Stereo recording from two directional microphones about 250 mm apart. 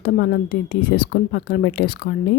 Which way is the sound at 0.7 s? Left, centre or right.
Left.